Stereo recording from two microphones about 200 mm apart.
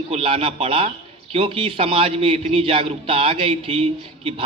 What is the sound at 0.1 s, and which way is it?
A man's voice, 25° right (ahead or behind).